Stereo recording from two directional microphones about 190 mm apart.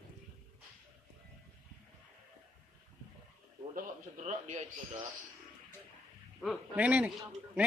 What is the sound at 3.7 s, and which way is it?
Speech, 40° right (ahead or behind).